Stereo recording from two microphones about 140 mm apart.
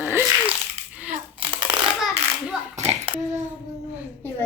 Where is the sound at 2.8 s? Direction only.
50° right (ahead or behind).